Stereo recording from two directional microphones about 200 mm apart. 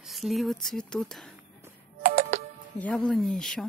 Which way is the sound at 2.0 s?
45° right (ahead or behind).